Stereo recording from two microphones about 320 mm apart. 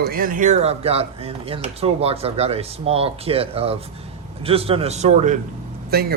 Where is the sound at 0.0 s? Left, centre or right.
Right.